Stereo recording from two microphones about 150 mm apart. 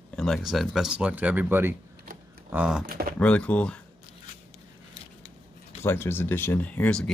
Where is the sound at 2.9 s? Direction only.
70° right (ahead or behind).